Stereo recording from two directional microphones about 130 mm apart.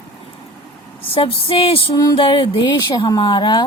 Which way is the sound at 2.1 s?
40° left (ahead or behind).